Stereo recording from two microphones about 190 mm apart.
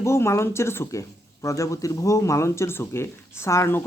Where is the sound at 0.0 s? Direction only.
15° left (ahead or behind).